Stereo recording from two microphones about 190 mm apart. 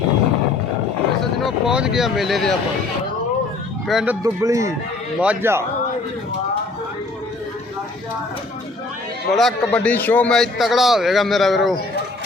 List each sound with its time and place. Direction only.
1.4 s a man's voice: centre (ahead or behind)
3.8 s a man's voice: 5° right (ahead or behind)
4.2 s speech: 15° right (ahead or behind)
9.3 s a man's voice: centre (ahead or behind)